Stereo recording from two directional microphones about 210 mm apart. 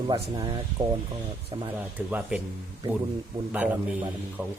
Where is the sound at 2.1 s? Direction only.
5° right (ahead or behind).